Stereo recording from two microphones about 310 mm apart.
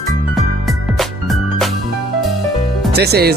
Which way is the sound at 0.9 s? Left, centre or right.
Centre.